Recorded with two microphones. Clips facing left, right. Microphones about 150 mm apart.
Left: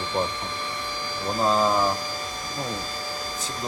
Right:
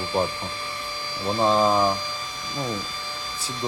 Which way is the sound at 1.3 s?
5° right (ahead or behind).